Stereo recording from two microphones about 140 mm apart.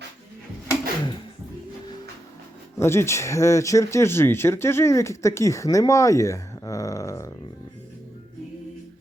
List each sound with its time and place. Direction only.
0.7 s music: 30° left (ahead or behind)
2.7 s speech: 20° left (ahead or behind)